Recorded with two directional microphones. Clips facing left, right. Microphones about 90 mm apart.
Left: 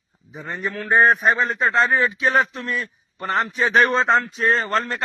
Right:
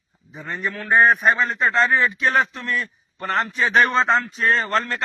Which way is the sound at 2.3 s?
25° left (ahead or behind).